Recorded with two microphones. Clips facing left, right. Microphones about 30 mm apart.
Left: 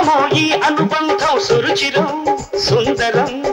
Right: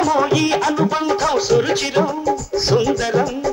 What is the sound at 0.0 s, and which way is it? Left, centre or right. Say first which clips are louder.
Music: left 3 dB; left.